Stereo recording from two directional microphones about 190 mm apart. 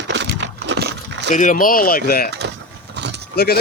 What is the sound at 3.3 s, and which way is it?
Speech, 55° left (ahead or behind).